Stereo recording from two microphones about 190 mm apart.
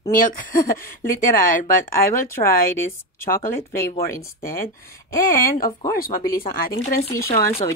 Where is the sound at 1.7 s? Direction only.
45° left (ahead or behind).